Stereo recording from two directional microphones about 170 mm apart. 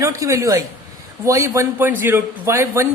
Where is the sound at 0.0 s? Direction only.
20° right (ahead or behind).